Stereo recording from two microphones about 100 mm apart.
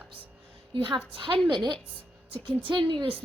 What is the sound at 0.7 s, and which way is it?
A woman's voice, 55° right (ahead or behind).